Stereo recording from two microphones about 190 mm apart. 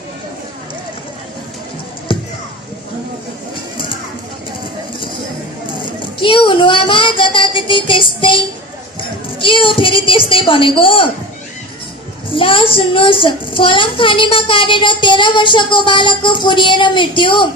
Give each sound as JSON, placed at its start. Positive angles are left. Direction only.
{"t": 3.5, "sound": "bird", "side_deg": 25}
{"t": 6.1, "sound": "speech", "side_deg": 25}
{"t": 12.3, "sound": "speech", "side_deg": 25}